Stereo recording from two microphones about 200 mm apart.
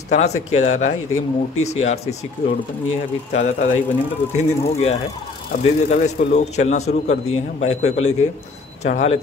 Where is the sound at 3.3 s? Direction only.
40° left (ahead or behind).